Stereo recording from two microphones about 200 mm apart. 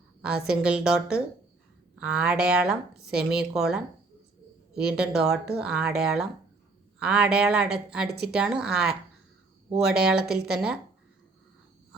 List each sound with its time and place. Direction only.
0.2 s a woman's voice: 5° right (ahead or behind)